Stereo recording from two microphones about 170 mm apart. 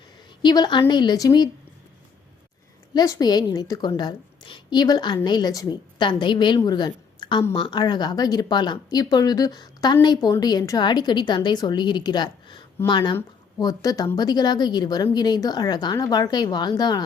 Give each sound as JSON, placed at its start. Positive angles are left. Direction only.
{"t": 0.4, "sound": "speech", "side_deg": 25}
{"t": 2.9, "sound": "a woman's voice", "side_deg": 25}